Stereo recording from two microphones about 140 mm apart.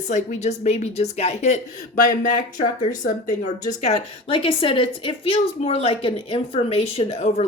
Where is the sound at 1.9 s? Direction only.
65° left (ahead or behind).